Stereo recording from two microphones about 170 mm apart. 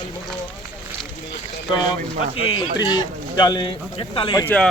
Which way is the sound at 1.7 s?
30° left (ahead or behind).